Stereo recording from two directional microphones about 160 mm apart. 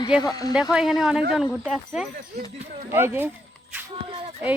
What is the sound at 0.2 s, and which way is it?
Speech, 25° left (ahead or behind).